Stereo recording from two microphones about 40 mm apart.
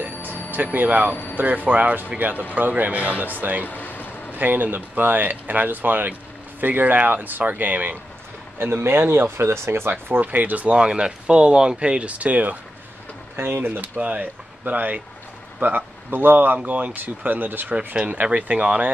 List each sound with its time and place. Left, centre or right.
0.0 s music: right
0.7 s speech: right
3.6 s vehicle: left
4.3 s speech: right
8.5 s speech: right
9.8 s speech: right
10.2 s speech: right
10.8 s speech: right
13.4 s speech: right
13.7 s speech: right
15.6 s speech: right
16.5 s speech: right
17.0 s speech: right
18.0 s speech: right